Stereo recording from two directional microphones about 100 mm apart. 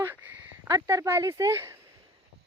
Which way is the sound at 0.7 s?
35° right (ahead or behind).